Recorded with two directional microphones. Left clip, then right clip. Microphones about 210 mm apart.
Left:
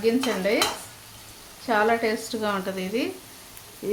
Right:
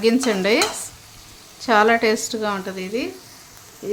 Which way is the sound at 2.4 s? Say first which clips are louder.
Right 2 dB; 15° right (ahead or behind).